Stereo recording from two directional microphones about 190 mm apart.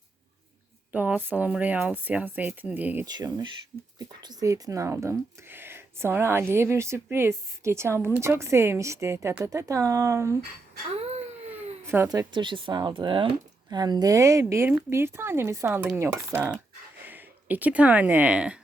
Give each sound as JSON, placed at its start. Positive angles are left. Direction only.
{"t": 0.9, "sound": "speech", "side_deg": -10}
{"t": 3.1, "sound": "speech", "side_deg": -20}
{"t": 10.9, "sound": "baby cry", "side_deg": -35}
{"t": 11.5, "sound": "speech", "side_deg": -10}